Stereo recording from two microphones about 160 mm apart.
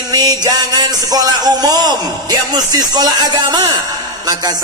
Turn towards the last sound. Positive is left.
turn(degrees=-25)  # may be behind; listen again after turning